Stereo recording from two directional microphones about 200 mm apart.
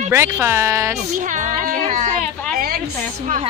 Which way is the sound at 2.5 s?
50° right (ahead or behind).